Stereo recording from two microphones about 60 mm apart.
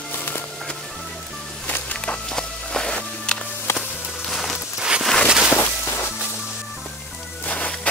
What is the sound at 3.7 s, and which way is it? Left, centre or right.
Music, left.